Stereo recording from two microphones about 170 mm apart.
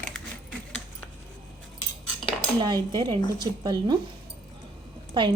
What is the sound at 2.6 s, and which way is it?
A woman's voice, 25° right (ahead or behind).